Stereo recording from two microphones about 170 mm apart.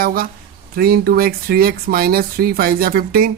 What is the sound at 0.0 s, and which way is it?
Speech, 60° right (ahead or behind).